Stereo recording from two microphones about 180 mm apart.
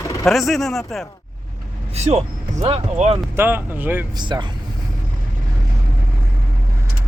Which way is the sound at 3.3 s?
10° right (ahead or behind).